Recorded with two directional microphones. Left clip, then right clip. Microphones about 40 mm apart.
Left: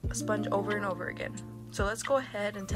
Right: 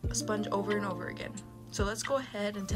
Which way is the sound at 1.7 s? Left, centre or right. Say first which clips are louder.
Left 3 dB; right.